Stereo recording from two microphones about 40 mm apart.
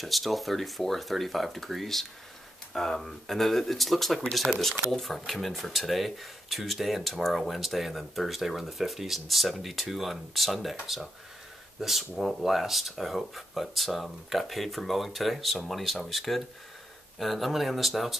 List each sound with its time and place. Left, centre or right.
0.0 s speech: centre
12.0 s speech: centre